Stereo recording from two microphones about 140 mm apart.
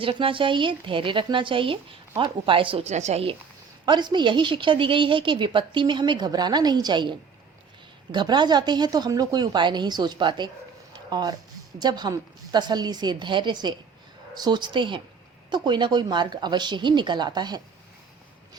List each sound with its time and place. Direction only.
0.0 s a woman's voice: 40° right (ahead or behind)
3.8 s a woman's voice: 30° right (ahead or behind)
10.9 s a sound: 30° right (ahead or behind)
11.8 s a woman's voice: 30° right (ahead or behind)